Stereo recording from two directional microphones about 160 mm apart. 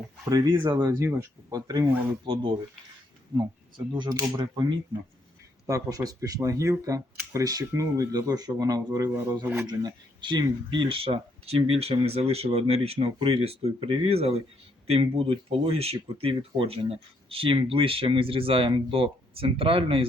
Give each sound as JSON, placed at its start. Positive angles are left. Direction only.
{"t": 0.3, "sound": "speech", "side_deg": -25}